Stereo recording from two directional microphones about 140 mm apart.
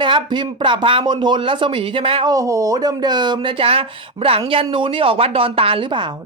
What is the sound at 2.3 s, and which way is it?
Speech, 25° right (ahead or behind).